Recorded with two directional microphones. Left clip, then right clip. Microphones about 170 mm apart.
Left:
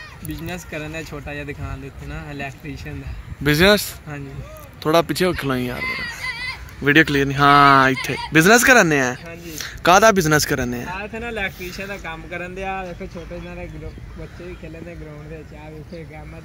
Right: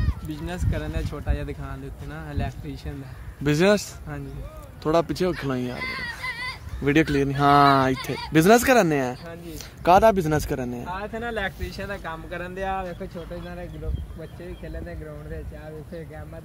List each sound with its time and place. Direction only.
0.4 s speech: 5° left (ahead or behind)
5.8 s children playing: 20° right (ahead or behind)
6.8 s speech: 5° right (ahead or behind)